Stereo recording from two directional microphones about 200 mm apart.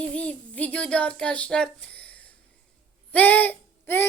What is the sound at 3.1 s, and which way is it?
Speech, 10° left (ahead or behind).